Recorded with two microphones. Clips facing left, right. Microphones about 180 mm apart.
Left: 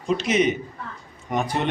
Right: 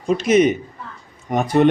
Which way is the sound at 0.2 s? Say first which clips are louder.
Right 6 dB; 45° right (ahead or behind).